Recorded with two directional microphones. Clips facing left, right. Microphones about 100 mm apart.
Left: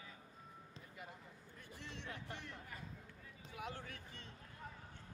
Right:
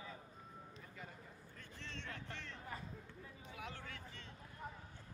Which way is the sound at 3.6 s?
20° left (ahead or behind).